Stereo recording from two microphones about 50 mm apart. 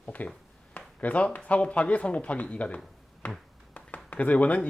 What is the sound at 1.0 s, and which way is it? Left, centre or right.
Speech, left.